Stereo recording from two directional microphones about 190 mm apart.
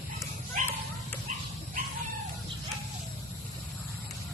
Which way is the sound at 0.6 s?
40° right (ahead or behind).